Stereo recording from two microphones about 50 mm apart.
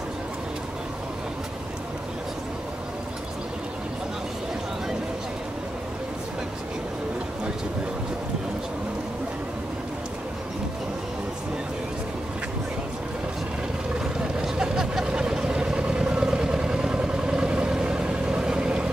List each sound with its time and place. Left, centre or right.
14.4 s vehicle: centre